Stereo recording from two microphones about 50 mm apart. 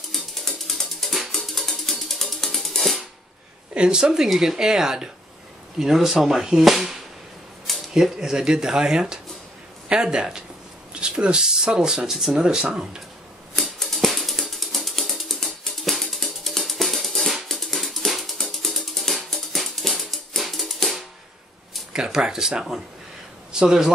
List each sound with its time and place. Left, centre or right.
0.1 s music: centre
3.7 s speech: centre
12.4 s speech: centre
13.6 s ratchet: centre
17.6 s music: centre
21.9 s a man's voice: centre